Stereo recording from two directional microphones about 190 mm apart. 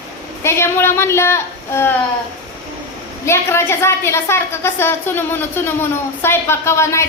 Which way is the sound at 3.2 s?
15° left (ahead or behind).